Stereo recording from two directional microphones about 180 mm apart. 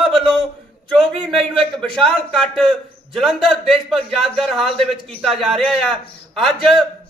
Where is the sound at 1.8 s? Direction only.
5° left (ahead or behind).